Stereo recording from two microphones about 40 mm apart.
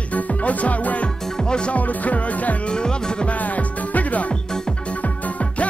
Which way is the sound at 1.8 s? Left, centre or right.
Left.